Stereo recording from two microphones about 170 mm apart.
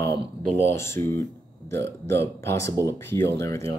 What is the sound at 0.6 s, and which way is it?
Speech, 15° left (ahead or behind).